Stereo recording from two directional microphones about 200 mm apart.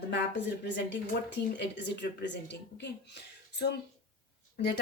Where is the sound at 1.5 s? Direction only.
60° left (ahead or behind).